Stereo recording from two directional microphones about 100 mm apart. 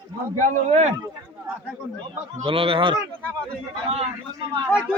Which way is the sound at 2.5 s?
60° right (ahead or behind).